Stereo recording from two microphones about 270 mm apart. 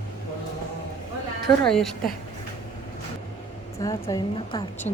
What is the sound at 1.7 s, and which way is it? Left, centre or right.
Speech, centre.